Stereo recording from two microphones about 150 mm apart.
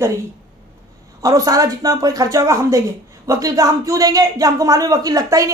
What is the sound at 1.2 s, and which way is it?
A man's voice, 25° right (ahead or behind).